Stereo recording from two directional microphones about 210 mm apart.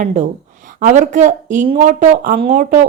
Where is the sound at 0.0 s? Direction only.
35° right (ahead or behind).